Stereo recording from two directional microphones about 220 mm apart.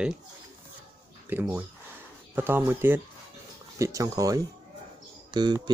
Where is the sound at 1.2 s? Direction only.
10° right (ahead or behind).